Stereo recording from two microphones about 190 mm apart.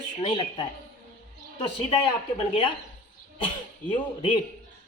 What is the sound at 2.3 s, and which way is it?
Speech, 25° left (ahead or behind).